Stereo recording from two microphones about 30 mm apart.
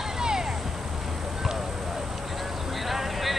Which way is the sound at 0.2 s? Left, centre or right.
Right.